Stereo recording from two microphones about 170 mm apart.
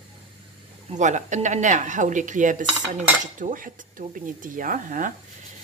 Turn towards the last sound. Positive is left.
turn(degrees=-50)  # may be behind; listen again after turning